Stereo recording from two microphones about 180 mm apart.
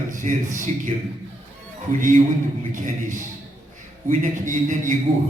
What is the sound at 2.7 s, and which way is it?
A man's voice, 45° right (ahead or behind).